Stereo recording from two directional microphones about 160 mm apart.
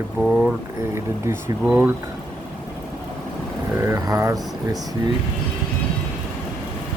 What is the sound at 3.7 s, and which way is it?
Speech, 20° right (ahead or behind).